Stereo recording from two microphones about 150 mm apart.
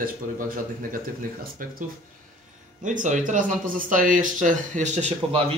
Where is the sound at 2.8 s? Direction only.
55° right (ahead or behind).